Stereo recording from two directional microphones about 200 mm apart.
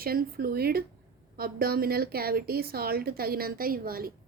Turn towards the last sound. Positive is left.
turn(degrees=-50)  # may be behind; listen again after turning